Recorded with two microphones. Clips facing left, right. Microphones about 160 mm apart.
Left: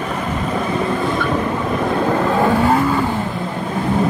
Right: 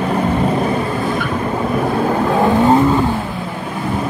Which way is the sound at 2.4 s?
20° right (ahead or behind).